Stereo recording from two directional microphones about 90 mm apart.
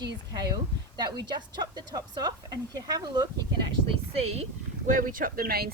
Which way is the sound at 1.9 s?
45° right (ahead or behind).